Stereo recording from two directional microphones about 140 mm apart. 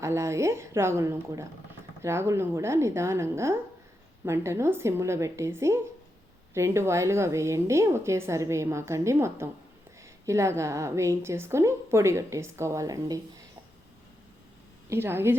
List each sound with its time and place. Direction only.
0.0 s a woman's voice: 20° right (ahead or behind)
14.8 s a woman's voice: 15° right (ahead or behind)